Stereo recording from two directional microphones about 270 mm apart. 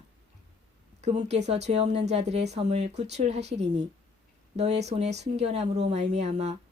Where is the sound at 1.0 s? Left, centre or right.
Right.